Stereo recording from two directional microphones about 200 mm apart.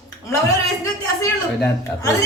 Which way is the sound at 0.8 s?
15° left (ahead or behind).